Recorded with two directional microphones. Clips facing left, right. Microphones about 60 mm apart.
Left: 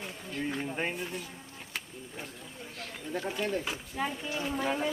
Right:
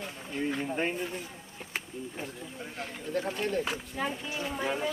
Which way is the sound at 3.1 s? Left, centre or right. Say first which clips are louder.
Right 1 dB; centre.